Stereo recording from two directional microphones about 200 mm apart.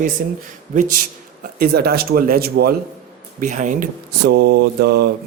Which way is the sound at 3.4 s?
40° right (ahead or behind).